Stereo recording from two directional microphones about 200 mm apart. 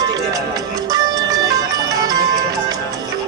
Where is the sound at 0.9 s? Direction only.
20° right (ahead or behind).